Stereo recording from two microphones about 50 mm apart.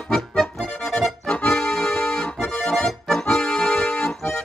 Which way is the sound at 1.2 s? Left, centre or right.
Left.